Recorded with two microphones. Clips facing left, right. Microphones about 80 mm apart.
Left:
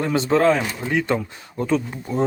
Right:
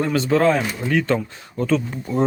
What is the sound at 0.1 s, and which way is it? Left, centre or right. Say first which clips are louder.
Speech: left 2 dB; left.